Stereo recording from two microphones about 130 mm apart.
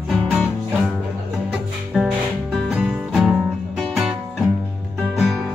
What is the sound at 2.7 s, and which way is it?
Music, 5° right (ahead or behind).